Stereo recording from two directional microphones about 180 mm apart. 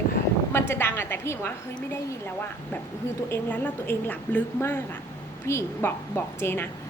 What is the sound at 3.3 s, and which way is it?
A woman's voice, 10° left (ahead or behind).